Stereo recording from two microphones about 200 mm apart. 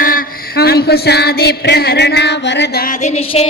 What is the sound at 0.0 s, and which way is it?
Music, 45° left (ahead or behind).